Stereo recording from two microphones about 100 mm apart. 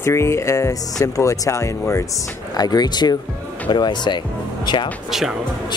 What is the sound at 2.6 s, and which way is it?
Speech, 40° left (ahead or behind).